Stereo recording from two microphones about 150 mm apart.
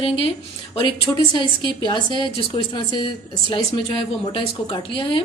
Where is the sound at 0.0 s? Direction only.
40° left (ahead or behind).